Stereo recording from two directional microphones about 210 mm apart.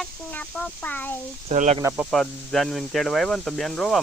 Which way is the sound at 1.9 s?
Centre (ahead or behind).